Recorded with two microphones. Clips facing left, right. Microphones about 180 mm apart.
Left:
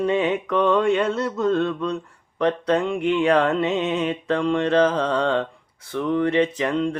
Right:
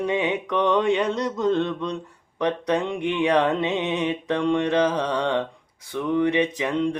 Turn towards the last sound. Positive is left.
turn(degrees=-15)  # may be behind; listen again after turning